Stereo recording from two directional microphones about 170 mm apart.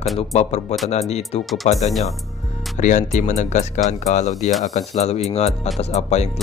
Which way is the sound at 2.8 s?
45° left (ahead or behind).